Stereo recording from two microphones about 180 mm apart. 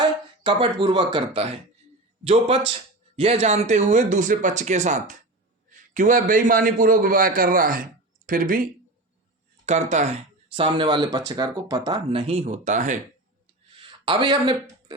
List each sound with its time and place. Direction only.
0.0 s a man's voice: 30° right (ahead or behind); by 8.7 s 50° right (ahead or behind)
9.6 s speech: 40° right (ahead or behind)
13.7 s a sound: 30° right (ahead or behind)